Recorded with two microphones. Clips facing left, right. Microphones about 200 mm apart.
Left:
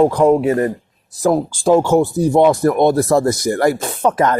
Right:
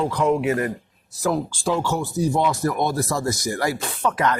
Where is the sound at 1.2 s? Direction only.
45° left (ahead or behind).